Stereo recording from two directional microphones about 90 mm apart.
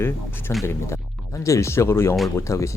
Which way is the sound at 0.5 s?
30° left (ahead or behind).